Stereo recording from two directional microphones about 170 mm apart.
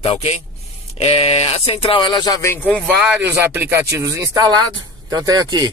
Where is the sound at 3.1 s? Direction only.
10° right (ahead or behind).